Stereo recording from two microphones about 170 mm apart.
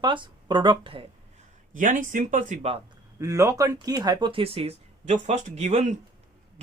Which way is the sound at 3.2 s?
20° right (ahead or behind).